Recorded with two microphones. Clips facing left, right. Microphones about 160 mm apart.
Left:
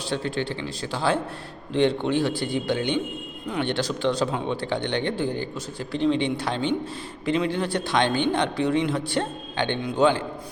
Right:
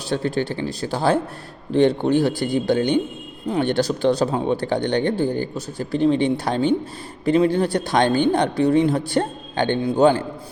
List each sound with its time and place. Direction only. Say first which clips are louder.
0.1 s speech: right 5 dB; 40° right (ahead or behind)